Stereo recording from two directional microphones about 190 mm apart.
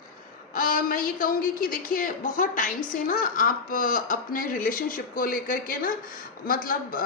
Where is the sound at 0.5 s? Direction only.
45° left (ahead or behind).